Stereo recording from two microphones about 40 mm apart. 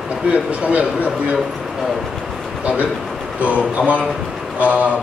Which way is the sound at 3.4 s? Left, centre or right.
Right.